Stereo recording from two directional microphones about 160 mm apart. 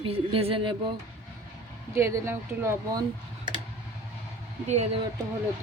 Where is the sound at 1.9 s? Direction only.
20° right (ahead or behind).